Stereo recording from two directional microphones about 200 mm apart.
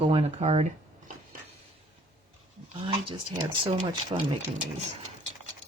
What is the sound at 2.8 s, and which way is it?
Speech, 30° right (ahead or behind).